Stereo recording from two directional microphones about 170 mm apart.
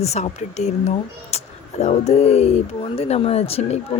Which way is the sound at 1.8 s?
40° left (ahead or behind).